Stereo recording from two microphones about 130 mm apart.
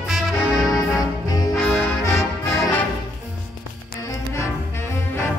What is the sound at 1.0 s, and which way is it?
Brass instrument, 30° left (ahead or behind).